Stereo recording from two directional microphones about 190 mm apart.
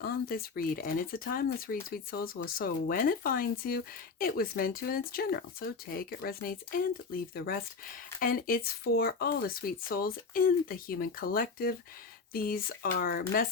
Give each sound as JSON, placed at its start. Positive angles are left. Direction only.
{"t": 0.0, "sound": "speech", "side_deg": 55}